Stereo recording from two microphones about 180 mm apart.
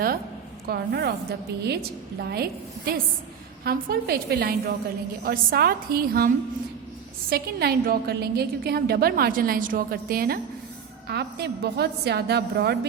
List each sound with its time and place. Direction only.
0.7 s a woman's voice: 60° right (ahead or behind)
11.1 s a woman's voice: 65° right (ahead or behind)